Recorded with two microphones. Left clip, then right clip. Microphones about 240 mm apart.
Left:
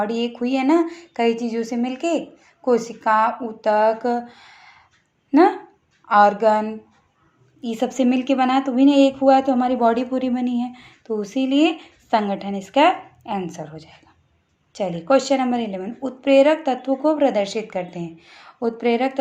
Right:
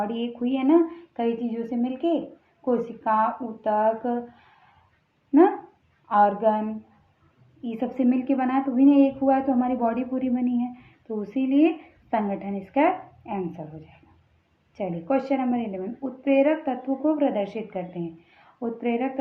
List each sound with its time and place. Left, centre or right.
0.0 s a woman's voice: left
6.1 s a woman's voice: left